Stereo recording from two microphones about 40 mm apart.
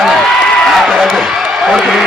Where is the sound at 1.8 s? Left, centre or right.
Centre.